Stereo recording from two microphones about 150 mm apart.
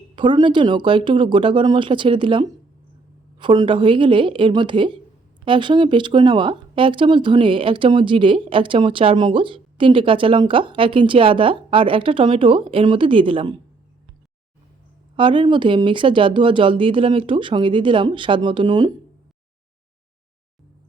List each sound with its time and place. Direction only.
0.2 s speech: 30° right (ahead or behind)
15.1 s speech: 35° right (ahead or behind)